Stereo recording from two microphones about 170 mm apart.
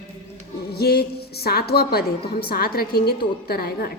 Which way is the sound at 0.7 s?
70° left (ahead or behind).